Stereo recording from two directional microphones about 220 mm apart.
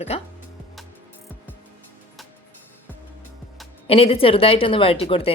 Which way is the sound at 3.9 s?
25° left (ahead or behind).